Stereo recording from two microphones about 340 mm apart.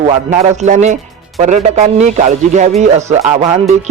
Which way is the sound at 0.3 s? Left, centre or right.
Centre.